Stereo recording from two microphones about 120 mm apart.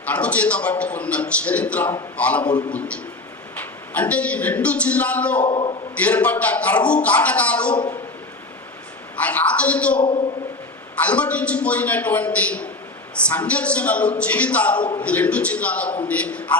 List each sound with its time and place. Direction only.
0.0 s a man's voice: 10° left (ahead or behind)
2.5 s a man's voice: 40° left (ahead or behind)
2.7 s a man's voice: 10° left (ahead or behind)
5.5 s a man's voice: 45° left (ahead or behind)
5.9 s a man's voice: 10° left (ahead or behind)
9.1 s a man's voice: 10° left (ahead or behind)
10.0 s a man's voice: 45° left (ahead or behind)
10.9 s a man's voice: 10° left (ahead or behind)